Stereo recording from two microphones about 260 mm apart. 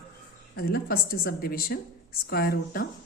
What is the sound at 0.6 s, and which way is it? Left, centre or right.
Speech, left.